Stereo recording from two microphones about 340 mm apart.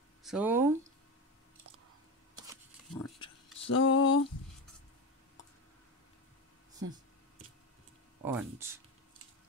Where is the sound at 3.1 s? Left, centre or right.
Centre.